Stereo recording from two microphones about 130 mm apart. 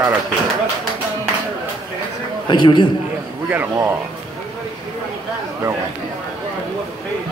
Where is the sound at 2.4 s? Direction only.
35° left (ahead or behind).